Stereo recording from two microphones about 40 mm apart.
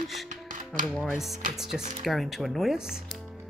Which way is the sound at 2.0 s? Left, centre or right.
Centre.